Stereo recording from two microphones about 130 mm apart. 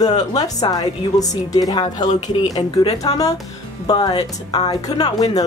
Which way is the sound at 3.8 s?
35° left (ahead or behind).